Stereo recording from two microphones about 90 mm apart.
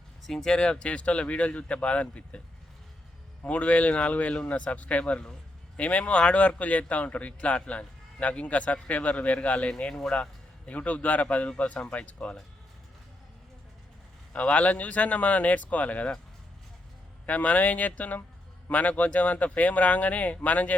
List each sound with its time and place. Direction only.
0.3 s speech: 5° left (ahead or behind)
3.4 s speech: 15° left (ahead or behind)
14.3 s speech: 15° left (ahead or behind)
17.2 s speech: 15° left (ahead or behind)